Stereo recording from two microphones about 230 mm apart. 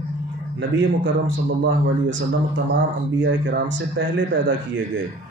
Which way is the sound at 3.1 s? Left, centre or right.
Right.